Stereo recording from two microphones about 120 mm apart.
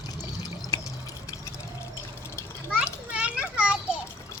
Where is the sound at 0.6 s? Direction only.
25° left (ahead or behind).